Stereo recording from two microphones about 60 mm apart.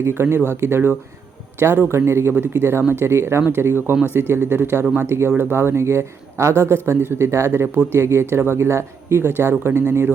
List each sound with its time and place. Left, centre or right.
0.0 s speech: right